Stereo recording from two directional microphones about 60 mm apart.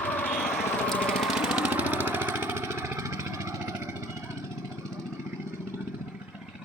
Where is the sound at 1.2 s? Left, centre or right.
Centre; by 3.9 s right.